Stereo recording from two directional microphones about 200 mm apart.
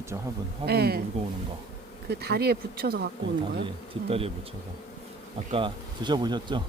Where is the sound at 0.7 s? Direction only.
50° right (ahead or behind).